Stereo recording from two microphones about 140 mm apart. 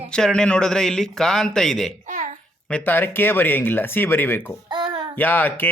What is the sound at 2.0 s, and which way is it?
Babbling, 65° right (ahead or behind).